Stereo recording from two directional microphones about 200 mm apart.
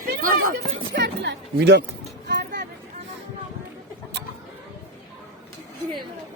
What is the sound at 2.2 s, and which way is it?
Music, 55° right (ahead or behind).